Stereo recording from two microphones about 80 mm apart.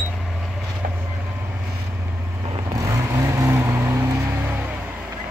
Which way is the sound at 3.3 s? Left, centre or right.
Right.